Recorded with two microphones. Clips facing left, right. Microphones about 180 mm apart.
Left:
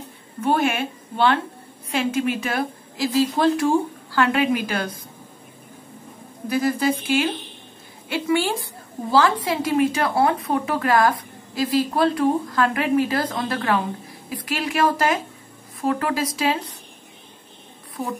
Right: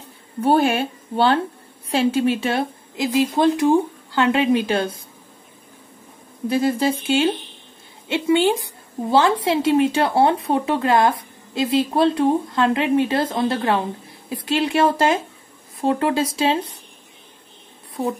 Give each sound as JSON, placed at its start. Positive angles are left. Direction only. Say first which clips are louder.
{"t": 0.4, "sound": "speech", "louder": "right 4 dB", "side_deg": -35}
{"t": 6.5, "sound": "speech", "louder": "right 1 dB", "side_deg": -25}
{"t": 18.0, "sound": "speech", "louder": "right 5 dB", "side_deg": -35}